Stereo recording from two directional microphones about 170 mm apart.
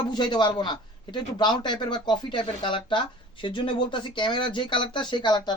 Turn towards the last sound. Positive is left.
turn(degrees=25)  # may be behind; listen again after turning